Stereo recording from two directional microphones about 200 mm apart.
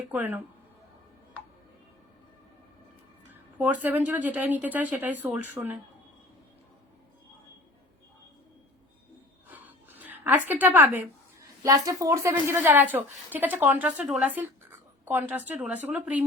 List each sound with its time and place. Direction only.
0.1 s a woman's voice: 10° right (ahead or behind)
3.6 s a woman's voice: 10° right (ahead or behind)
9.5 s a sound: 10° right (ahead or behind)
11.6 s a woman's voice: 15° right (ahead or behind)